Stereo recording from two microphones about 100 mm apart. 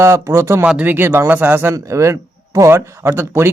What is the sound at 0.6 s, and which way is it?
Speech, 15° right (ahead or behind).